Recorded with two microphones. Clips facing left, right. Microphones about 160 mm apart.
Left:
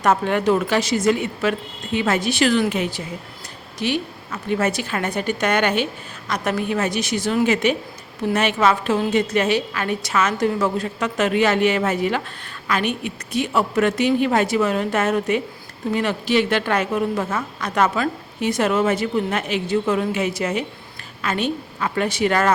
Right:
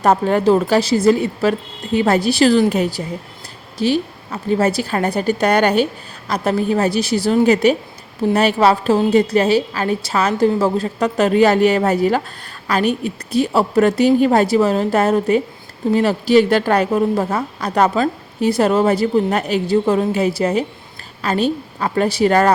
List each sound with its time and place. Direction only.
0.0 s a woman's voice: 35° right (ahead or behind)